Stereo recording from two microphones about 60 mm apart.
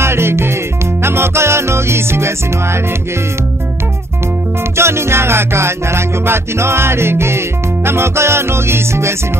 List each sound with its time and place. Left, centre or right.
0.0 s music: right
4.7 s music: right